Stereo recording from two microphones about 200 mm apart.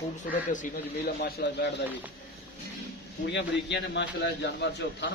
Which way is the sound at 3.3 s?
60° left (ahead or behind).